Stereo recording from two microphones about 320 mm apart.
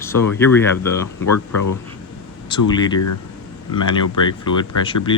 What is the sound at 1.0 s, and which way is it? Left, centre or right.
Speech, left.